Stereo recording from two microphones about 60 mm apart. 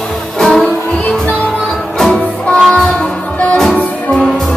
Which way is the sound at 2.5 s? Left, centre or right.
Centre.